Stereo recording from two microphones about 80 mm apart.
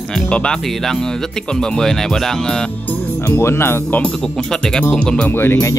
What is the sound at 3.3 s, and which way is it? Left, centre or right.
Speech, left.